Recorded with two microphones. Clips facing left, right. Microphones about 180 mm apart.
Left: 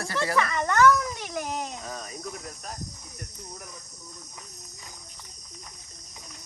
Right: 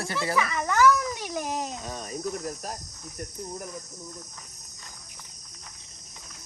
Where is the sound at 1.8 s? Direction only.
30° right (ahead or behind).